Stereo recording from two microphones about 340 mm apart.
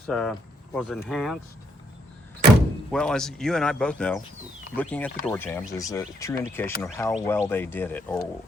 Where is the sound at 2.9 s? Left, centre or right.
Centre.